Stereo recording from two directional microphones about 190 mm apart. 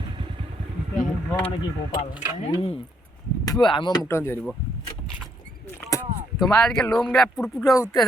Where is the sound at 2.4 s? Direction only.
30° left (ahead or behind).